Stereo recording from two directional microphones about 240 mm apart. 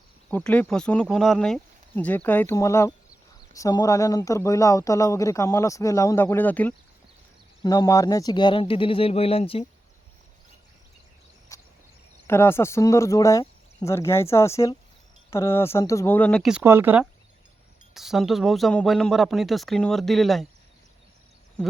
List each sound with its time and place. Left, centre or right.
0.3 s speech: centre; by 9.6 s left
11.5 s a sound: centre
12.3 s speech: centre